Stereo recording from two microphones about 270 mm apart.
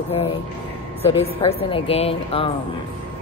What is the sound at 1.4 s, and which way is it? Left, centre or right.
Speech, left.